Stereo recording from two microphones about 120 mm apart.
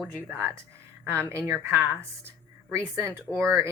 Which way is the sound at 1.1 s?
20° right (ahead or behind).